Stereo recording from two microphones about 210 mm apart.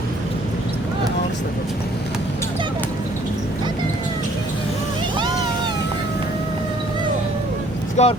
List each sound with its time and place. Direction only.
8.0 s speech: 30° left (ahead or behind)